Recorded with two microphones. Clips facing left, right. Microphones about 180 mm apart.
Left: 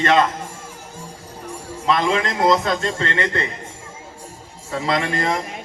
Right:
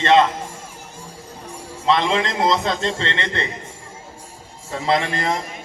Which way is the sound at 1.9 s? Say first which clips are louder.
Even; 25° right (ahead or behind).